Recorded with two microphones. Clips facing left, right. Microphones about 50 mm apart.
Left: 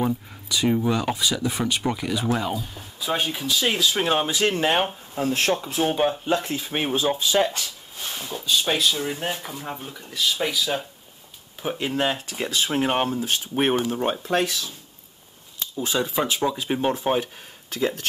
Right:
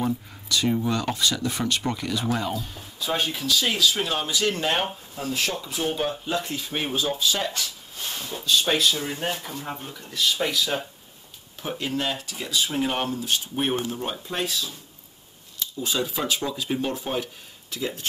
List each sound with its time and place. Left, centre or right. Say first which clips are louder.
0.0 s speech: left 2 dB; centre
3.4 s speech: even; left
5.1 s speech: left 7 dB; left
8.5 s speech: even; centre
11.9 s speech: left 4 dB; left
12.9 s speech: left 3 dB; left
14.3 s speech: left 3 dB; left
15.6 s cutlery: left 2 dB; left
16.0 s speech: left 4 dB; left
17.6 s speech: left 6 dB; left